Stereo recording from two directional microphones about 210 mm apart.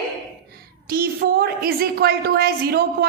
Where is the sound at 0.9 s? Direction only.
45° right (ahead or behind).